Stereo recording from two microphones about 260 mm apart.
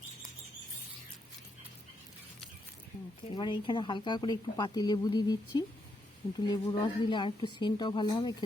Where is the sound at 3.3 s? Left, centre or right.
Centre.